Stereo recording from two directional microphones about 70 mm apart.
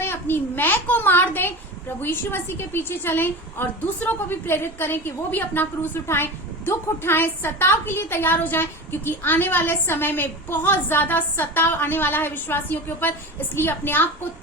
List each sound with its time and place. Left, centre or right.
0.0 s a child's voice: left